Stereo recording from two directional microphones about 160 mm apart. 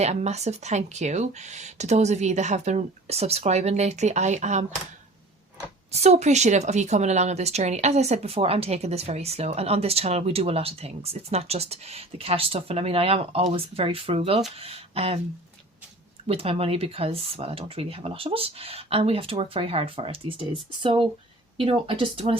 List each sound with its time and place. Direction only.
0.0 s speech: 45° right (ahead or behind)
5.9 s speech: 45° right (ahead or behind)
16.2 s speech: 35° right (ahead or behind)